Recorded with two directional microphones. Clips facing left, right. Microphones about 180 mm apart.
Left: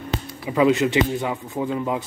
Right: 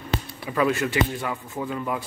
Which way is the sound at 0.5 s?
20° left (ahead or behind).